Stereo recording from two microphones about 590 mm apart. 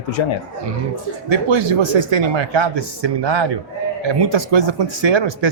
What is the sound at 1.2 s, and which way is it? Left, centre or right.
Speech, right.